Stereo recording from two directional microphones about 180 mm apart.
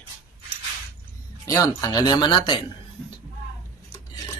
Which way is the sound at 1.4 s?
20° left (ahead or behind).